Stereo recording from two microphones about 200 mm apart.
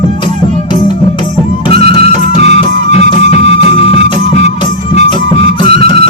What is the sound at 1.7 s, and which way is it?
Music, 30° left (ahead or behind).